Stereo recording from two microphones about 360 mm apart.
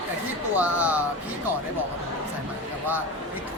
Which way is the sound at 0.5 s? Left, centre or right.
Centre.